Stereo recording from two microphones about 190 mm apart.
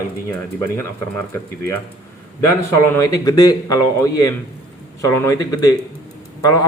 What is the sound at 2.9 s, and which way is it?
A man's voice, 20° left (ahead or behind).